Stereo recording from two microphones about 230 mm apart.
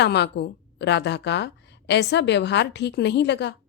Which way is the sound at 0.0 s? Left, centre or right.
Left.